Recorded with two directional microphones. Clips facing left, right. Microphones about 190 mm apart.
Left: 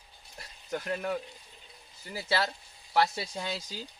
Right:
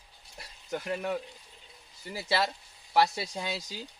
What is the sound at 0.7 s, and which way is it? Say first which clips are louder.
Speech: even; 5° right (ahead or behind).